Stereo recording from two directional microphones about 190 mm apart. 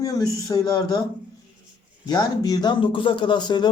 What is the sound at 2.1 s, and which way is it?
Speech, 20° left (ahead or behind).